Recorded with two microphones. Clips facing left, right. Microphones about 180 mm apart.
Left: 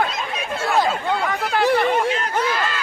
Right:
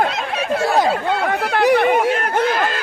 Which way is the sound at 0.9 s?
65° right (ahead or behind).